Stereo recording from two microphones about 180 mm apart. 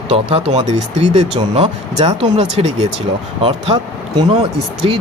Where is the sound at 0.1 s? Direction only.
35° right (ahead or behind).